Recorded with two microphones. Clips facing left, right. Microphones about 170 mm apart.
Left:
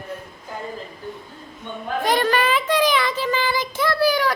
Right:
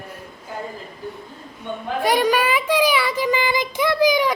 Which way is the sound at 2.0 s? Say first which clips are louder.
Right 2 dB; 10° right (ahead or behind).